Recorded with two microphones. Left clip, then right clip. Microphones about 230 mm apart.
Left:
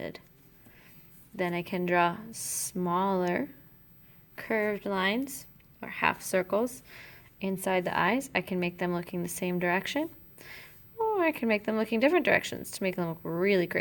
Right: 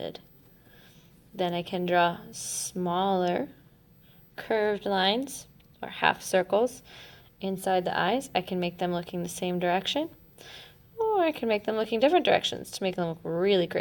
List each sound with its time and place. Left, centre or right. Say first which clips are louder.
1.4 s speech: right 2 dB; left